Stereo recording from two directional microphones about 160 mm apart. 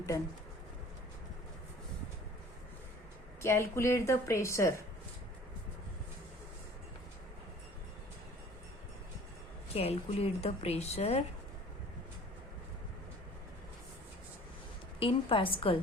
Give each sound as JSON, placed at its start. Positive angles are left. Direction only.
{"t": 3.4, "sound": "a woman's voice", "side_deg": 15}
{"t": 9.7, "sound": "a woman's voice", "side_deg": 40}
{"t": 14.9, "sound": "a woman's voice", "side_deg": 35}